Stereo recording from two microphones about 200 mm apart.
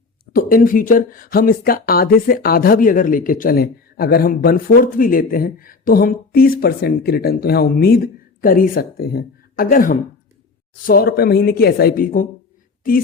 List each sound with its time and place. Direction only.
0.3 s speech: 45° left (ahead or behind)